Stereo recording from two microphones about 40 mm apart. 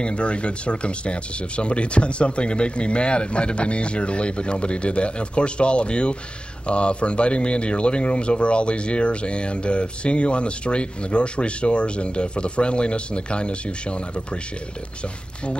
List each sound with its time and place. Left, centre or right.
0.0 s speech: left